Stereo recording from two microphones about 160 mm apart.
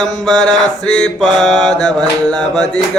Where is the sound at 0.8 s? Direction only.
5° left (ahead or behind).